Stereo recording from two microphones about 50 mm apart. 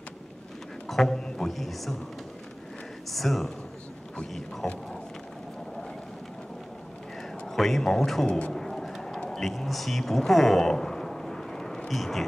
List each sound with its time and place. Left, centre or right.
0.8 s a man's voice: centre
3.1 s speech: centre
7.4 s speech: centre
8.3 s speech: left
8.5 s a sound: centre
11.9 s speech: centre